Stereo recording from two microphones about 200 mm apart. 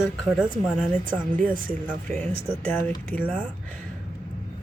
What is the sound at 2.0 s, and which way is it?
Speech, 5° left (ahead or behind).